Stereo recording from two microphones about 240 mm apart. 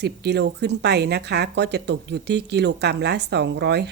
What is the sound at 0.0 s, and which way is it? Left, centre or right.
A woman's voice, right.